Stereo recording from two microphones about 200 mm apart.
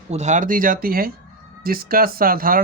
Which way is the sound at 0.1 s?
35° right (ahead or behind).